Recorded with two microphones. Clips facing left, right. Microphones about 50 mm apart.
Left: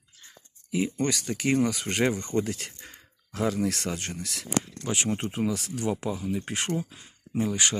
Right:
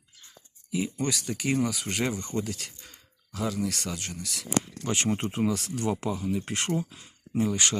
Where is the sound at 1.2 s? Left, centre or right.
Left.